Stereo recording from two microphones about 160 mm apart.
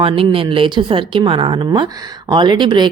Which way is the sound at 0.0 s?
35° right (ahead or behind).